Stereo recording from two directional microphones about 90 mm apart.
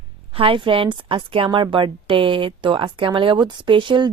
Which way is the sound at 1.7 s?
70° right (ahead or behind).